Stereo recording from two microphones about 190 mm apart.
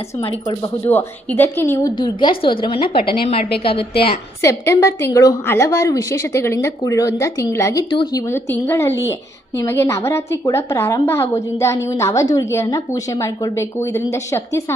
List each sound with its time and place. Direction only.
0.2 s a woman's voice: 25° left (ahead or behind)
0.9 s a woman's voice: 10° left (ahead or behind)
1.7 s a woman's voice: 20° left (ahead or behind)
4.4 s a woman's voice: 15° left (ahead or behind)